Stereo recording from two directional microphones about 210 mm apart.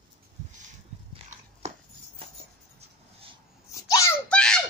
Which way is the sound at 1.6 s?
30° right (ahead or behind).